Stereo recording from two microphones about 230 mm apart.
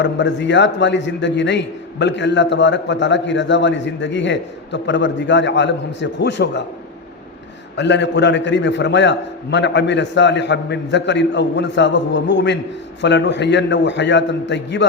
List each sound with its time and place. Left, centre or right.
0.0 s a man's voice: left
7.8 s a man's voice: left